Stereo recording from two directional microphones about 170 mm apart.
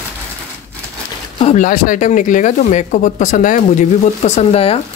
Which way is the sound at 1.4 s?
45° left (ahead or behind).